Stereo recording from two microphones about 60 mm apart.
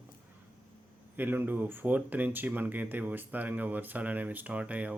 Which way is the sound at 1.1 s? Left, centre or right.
Right.